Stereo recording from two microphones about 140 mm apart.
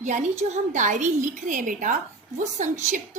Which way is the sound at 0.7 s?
60° right (ahead or behind).